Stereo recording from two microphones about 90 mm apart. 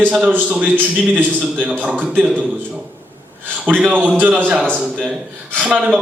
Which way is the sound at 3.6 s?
15° right (ahead or behind).